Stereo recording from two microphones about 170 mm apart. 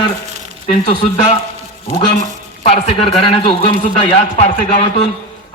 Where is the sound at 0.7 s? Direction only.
40° left (ahead or behind).